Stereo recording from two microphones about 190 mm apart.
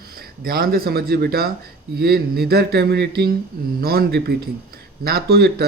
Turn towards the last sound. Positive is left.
turn(degrees=-55)  # may be behind; listen again after turning